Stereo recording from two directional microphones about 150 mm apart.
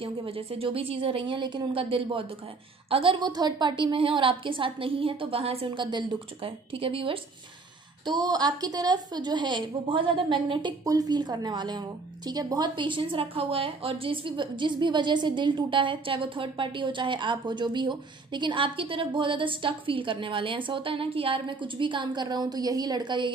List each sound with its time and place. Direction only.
0.0 s a woman's voice: 40° right (ahead or behind)